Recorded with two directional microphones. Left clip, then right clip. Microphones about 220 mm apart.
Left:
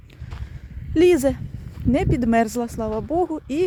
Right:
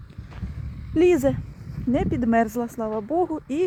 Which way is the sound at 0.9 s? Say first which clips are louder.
Left 2 dB; 10° left (ahead or behind).